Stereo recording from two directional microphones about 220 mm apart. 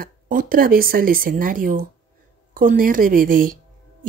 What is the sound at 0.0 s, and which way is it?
A woman's voice, 40° right (ahead or behind).